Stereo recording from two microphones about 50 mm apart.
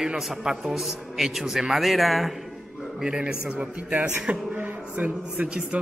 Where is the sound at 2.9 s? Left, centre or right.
Centre.